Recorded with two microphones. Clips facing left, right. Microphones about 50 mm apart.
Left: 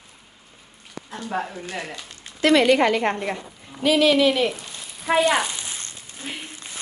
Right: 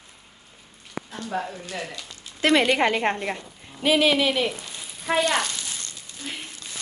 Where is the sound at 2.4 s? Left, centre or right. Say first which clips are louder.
Left 3 dB; right.